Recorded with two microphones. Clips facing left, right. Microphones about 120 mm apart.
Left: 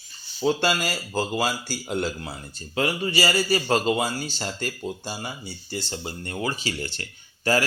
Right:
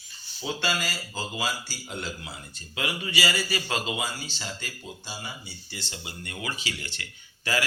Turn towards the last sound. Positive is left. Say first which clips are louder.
# left 6 dB
turn(degrees=40)  # may be behind; listen again after turning